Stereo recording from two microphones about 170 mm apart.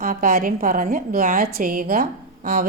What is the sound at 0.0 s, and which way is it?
A woman's voice, 55° right (ahead or behind).